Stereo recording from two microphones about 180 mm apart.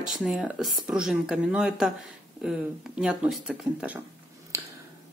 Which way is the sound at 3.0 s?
5° right (ahead or behind).